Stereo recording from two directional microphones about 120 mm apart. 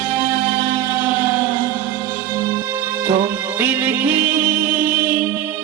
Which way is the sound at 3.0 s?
15° right (ahead or behind).